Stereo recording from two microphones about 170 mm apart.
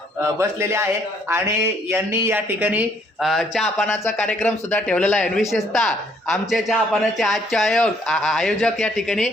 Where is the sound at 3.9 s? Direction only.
10° left (ahead or behind).